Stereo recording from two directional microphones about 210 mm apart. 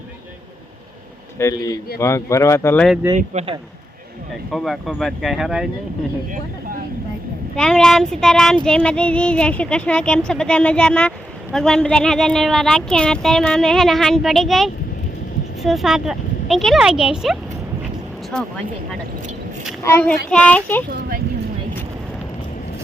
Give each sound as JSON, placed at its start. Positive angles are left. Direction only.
{"t": 1.4, "sound": "speech", "side_deg": 15}
{"t": 2.8, "sound": "speech", "side_deg": -5}
{"t": 3.2, "sound": "speech", "side_deg": -30}
{"t": 4.5, "sound": "speech", "side_deg": 0}
{"t": 7.5, "sound": "speech", "side_deg": 5}
{"t": 19.8, "sound": "speech", "side_deg": 10}